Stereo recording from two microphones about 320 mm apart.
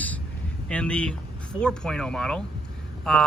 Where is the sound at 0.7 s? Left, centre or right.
Centre.